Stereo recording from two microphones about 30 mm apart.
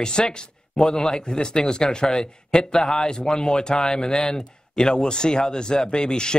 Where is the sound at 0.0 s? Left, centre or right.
Left.